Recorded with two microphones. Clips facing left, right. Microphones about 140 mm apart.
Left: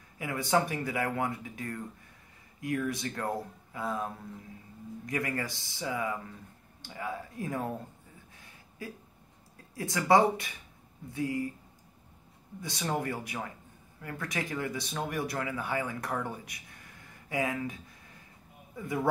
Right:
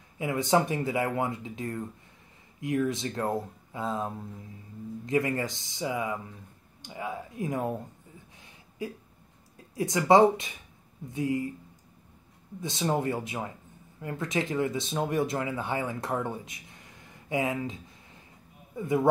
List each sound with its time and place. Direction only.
0.2 s speech: 20° right (ahead or behind)
8.4 s a sound: 20° right (ahead or behind)
9.8 s speech: 20° right (ahead or behind)
12.5 s speech: 20° right (ahead or behind)
18.8 s speech: 20° right (ahead or behind)